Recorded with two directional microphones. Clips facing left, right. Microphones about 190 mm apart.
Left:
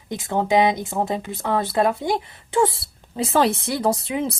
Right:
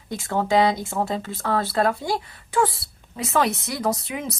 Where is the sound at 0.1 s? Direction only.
20° left (ahead or behind).